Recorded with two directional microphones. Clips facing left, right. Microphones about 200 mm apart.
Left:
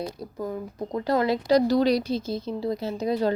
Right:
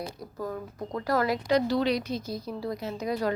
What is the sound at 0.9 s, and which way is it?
A woman's voice, 25° left (ahead or behind).